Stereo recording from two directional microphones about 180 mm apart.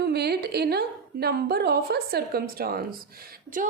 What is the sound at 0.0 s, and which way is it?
A woman's voice, 65° right (ahead or behind).